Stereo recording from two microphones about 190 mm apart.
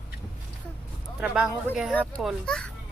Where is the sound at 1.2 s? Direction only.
5° right (ahead or behind).